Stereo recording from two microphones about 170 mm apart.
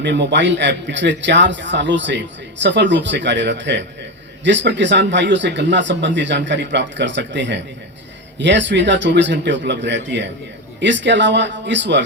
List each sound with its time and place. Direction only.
0.0 s a man's voice: 90° right